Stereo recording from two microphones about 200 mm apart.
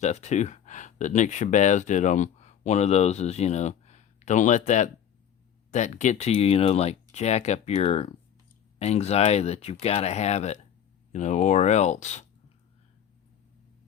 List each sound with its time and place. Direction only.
0.0 s speech: 35° left (ahead or behind)